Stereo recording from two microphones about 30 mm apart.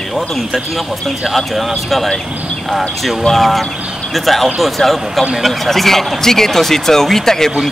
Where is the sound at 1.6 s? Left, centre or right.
Centre.